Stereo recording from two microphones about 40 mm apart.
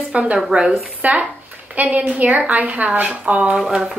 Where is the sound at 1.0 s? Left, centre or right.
Right.